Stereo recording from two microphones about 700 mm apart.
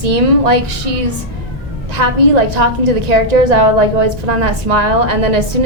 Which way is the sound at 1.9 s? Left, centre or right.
Right.